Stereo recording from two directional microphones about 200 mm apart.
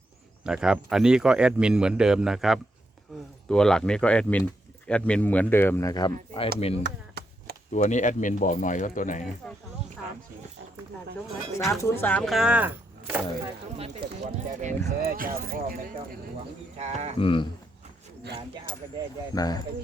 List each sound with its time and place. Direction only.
0.4 s speech: 5° right (ahead or behind); by 6.5 s 25° left (ahead or behind)
6.8 s chop: 55° right (ahead or behind)
7.7 s speech: 35° left (ahead or behind)
11.7 s speech: 15° left (ahead or behind); by 13.2 s 10° right (ahead or behind)
13.7 s speech: 30° right (ahead or behind)
16.7 s speech: 35° right (ahead or behind)
17.2 s speech: 25° left (ahead or behind)
19.3 s speech: 20° left (ahead or behind)